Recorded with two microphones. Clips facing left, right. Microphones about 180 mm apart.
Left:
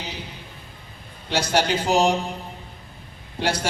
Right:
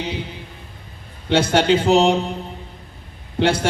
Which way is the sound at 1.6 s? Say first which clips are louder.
Right 8 dB; 25° right (ahead or behind).